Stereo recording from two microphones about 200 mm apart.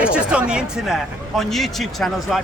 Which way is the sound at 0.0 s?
5° right (ahead or behind).